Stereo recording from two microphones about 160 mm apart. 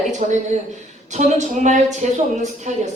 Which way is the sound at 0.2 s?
45° right (ahead or behind).